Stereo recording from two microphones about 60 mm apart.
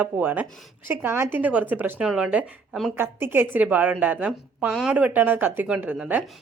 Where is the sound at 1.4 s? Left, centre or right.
Right.